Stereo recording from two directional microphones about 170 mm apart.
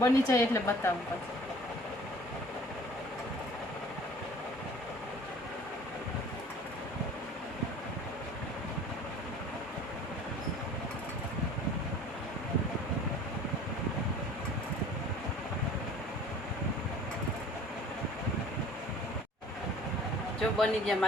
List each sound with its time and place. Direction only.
0.0 s speech: 15° left (ahead or behind)
20.6 s speech: centre (ahead or behind)